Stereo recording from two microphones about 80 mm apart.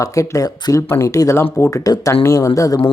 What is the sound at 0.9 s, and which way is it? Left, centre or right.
Speech, left.